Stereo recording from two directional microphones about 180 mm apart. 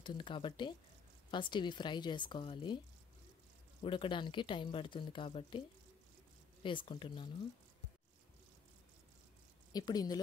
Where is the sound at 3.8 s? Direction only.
30° left (ahead or behind).